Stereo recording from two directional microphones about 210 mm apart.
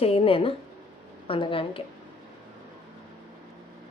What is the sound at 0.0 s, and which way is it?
A woman's voice, 25° left (ahead or behind).